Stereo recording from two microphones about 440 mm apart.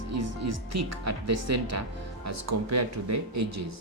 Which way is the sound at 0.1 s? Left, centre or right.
Right.